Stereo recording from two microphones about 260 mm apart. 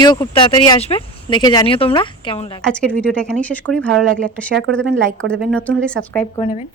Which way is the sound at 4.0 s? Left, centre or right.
Centre.